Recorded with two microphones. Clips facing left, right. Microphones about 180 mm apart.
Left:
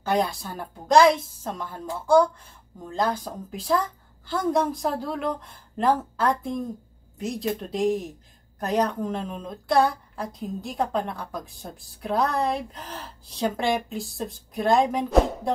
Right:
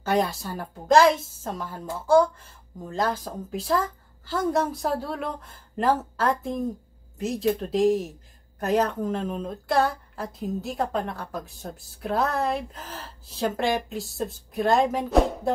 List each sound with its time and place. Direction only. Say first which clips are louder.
0.1 s speech: even; centre (ahead or behind)